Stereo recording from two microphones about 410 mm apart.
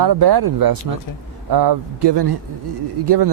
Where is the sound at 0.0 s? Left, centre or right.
Right.